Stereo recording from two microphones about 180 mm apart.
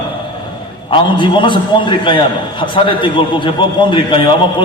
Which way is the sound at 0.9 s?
25° left (ahead or behind).